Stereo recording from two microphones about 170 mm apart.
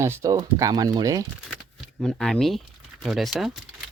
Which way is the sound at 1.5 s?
5° left (ahead or behind).